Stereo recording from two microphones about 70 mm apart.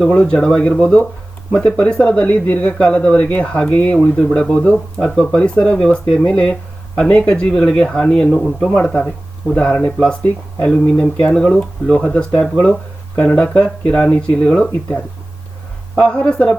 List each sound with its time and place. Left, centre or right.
0.0 s speech: centre
8.7 s speech: left
14.7 s speech: left
16.0 s speech: centre